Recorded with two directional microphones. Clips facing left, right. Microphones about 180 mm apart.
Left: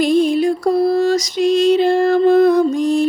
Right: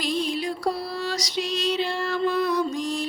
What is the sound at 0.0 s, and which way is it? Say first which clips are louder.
Music: left 13 dB; 50° left (ahead or behind).